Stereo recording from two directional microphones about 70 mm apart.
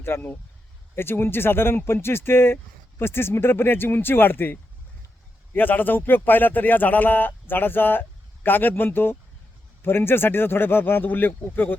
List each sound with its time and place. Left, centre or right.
0.0 s speech: left
5.5 s speech: left